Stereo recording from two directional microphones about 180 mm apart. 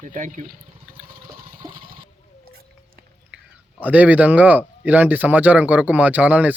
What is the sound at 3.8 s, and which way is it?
Speech, 10° right (ahead or behind).